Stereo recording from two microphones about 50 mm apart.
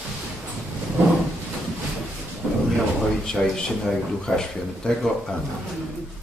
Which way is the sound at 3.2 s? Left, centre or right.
Centre.